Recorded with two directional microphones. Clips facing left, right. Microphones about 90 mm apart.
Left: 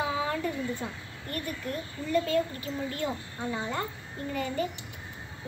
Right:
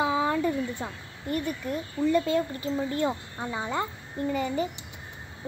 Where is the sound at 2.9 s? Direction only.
25° right (ahead or behind).